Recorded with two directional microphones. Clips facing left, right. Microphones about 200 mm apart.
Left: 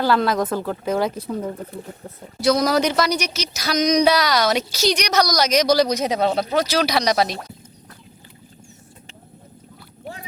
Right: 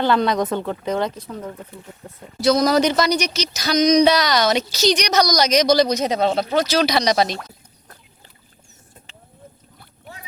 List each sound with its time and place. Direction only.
0.0 s speech: 5° left (ahead or behind)
1.5 s speech: 40° left (ahead or behind)
2.4 s speech: 10° left (ahead or behind)